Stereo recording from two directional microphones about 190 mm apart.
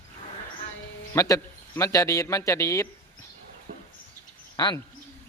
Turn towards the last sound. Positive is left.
turn(degrees=20)  # may be behind; listen again after turning